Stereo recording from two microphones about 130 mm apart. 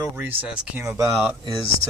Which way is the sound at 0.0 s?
15° right (ahead or behind).